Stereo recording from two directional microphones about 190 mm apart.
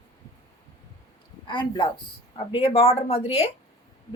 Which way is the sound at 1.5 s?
25° left (ahead or behind).